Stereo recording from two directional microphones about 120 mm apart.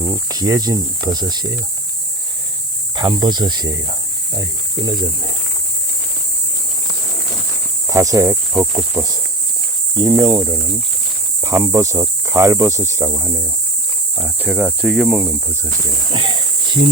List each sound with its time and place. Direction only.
0.0 s speech: 25° right (ahead or behind)
2.9 s speech: 35° right (ahead or behind)
7.9 s speech: 30° right (ahead or behind)
14.3 s speech: 10° right (ahead or behind)
16.1 s a sound: 45° right (ahead or behind)